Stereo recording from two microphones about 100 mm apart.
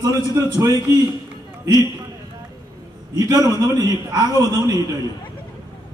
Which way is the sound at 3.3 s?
40° right (ahead or behind).